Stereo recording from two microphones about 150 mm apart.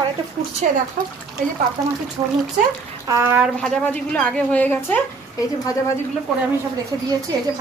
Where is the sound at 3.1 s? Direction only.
20° right (ahead or behind).